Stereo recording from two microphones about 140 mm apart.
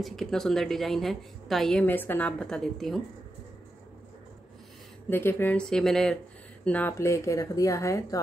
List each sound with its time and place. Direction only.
0.0 s a woman's voice: centre (ahead or behind)
1.9 s a woman's voice: 15° left (ahead or behind)
5.1 s a woman's voice: 15° left (ahead or behind)